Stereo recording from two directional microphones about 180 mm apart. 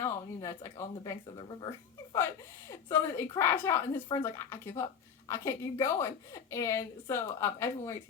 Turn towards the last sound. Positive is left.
turn(degrees=15)  # may be behind; listen again after turning